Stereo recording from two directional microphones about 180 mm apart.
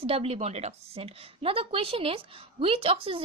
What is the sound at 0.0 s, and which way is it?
A woman's voice, 35° right (ahead or behind).